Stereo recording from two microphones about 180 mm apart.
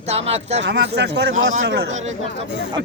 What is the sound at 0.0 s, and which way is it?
Speech, 35° right (ahead or behind).